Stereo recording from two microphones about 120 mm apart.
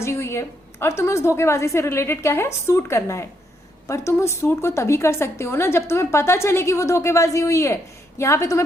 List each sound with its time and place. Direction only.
0.0 s a woman's voice: 20° left (ahead or behind)